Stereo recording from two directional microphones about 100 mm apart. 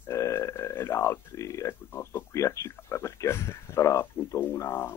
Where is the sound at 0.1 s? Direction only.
30° left (ahead or behind).